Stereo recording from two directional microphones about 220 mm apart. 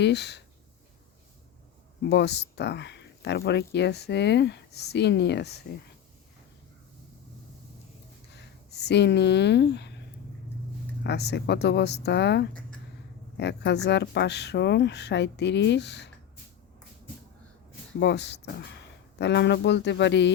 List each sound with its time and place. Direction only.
0.0 s speech: 50° left (ahead or behind)
2.0 s speech: 50° left (ahead or behind)
8.3 s speech: 50° left (ahead or behind)
11.0 s speech: 50° left (ahead or behind)
18.0 s speech: 50° left (ahead or behind)